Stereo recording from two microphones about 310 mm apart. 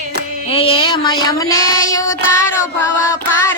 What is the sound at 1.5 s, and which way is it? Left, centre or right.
Child singing, left.